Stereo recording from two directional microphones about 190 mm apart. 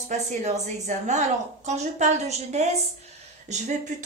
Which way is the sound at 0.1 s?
40° right (ahead or behind).